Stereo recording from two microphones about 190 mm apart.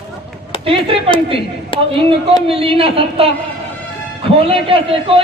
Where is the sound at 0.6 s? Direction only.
30° right (ahead or behind).